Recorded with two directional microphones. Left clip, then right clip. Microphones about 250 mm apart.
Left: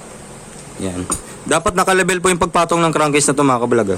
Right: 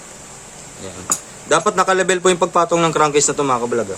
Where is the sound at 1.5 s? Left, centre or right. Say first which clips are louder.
Even; left.